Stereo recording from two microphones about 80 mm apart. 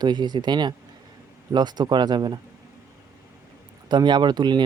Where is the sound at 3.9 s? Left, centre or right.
Right.